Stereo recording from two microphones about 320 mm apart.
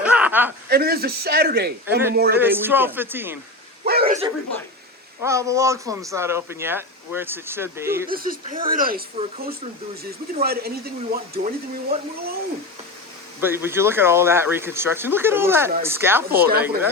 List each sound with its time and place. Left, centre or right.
0.0 s a sound: centre
0.7 s speech: right
2.4 s speech: centre
3.8 s a sound: right
5.2 s speech: centre
8.0 s speech: right
13.4 s speech: centre